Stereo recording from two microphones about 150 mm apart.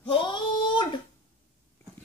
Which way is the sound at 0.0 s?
35° left (ahead or behind).